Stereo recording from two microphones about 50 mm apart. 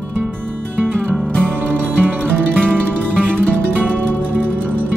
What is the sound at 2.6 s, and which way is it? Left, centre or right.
Music, centre.